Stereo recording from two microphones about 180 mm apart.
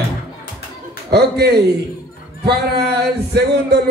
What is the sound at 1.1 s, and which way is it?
A man's voice, 65° right (ahead or behind).